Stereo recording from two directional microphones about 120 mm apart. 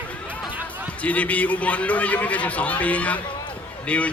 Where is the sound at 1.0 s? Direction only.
10° left (ahead or behind).